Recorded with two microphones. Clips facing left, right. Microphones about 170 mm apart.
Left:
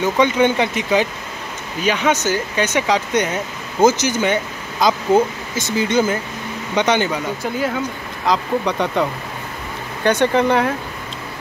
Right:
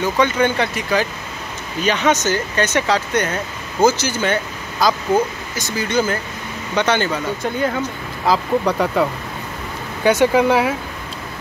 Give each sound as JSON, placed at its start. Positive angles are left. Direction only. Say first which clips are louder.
{"t": 0.0, "sound": "speech", "louder": "left 2 dB", "side_deg": 20}
{"t": 1.8, "sound": "speech", "louder": "right 1 dB", "side_deg": 10}
{"t": 7.4, "sound": "speech", "louder": "right 1 dB", "side_deg": 5}
{"t": 10.0, "sound": "speech", "louder": "right 2 dB", "side_deg": -10}